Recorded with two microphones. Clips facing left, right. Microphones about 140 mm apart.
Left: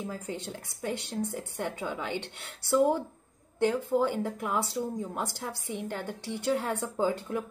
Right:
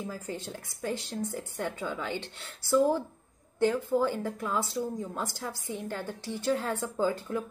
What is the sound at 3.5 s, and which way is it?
A woman's voice, 15° left (ahead or behind).